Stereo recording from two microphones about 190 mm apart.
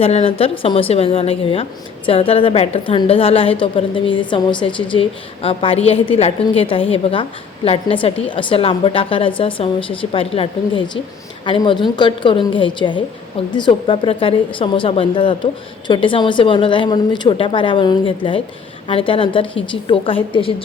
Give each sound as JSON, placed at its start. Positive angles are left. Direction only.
{"t": 0.0, "sound": "a woman's voice", "side_deg": 30}